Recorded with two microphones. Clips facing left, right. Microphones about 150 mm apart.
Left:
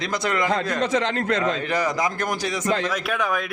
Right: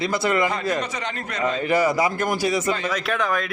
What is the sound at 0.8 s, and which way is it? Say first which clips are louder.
Speech: left 6 dB; 90° left.